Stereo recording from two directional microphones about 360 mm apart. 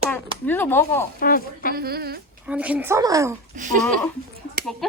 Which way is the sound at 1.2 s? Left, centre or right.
Left.